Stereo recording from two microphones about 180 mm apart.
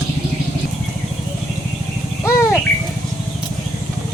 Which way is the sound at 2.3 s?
15° left (ahead or behind).